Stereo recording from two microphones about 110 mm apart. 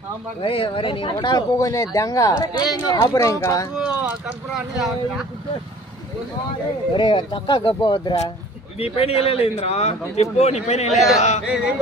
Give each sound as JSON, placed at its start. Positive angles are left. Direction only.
{"t": 0.4, "sound": "speech", "side_deg": 55}
{"t": 1.3, "sound": "speech", "side_deg": 30}
{"t": 4.6, "sound": "speech", "side_deg": 0}
{"t": 6.9, "sound": "speech", "side_deg": 45}
{"t": 8.7, "sound": "a man's voice", "side_deg": 65}
{"t": 11.0, "sound": "speech", "side_deg": 90}
{"t": 11.4, "sound": "music", "side_deg": -5}